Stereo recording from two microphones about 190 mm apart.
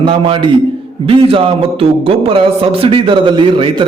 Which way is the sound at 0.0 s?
30° right (ahead or behind).